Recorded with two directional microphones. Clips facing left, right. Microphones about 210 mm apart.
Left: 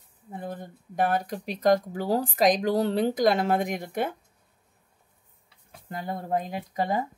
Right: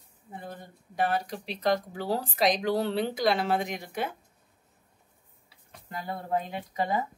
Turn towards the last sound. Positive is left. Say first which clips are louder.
# left 2 dB
turn(degrees=40)  # may be behind; listen again after turning